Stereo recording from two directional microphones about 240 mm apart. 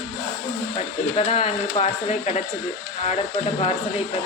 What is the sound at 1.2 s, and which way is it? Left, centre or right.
Speech, left.